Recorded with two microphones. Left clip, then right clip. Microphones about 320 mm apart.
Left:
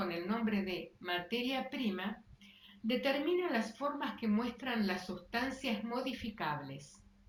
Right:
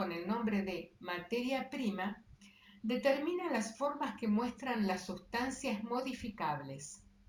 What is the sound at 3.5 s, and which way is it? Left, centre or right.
Speech, centre.